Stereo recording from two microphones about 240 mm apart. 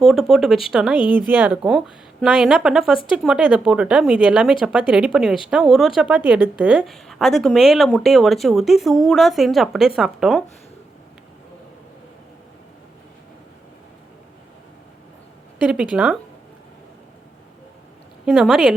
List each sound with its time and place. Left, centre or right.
0.0 s a woman's voice: centre
0.9 s speech: centre
1.3 s a woman's voice: centre
15.6 s a woman's voice: centre
18.3 s a woman's voice: centre